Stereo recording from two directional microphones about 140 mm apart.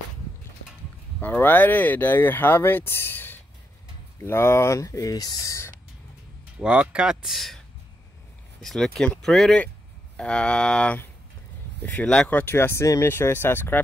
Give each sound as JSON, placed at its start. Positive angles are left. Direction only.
{"t": 1.2, "sound": "speech", "side_deg": 15}
{"t": 6.6, "sound": "speech", "side_deg": -10}